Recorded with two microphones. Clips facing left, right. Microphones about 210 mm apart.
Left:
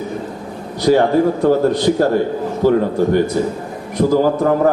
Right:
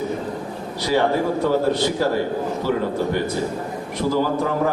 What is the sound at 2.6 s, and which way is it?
Speech, 50° left (ahead or behind).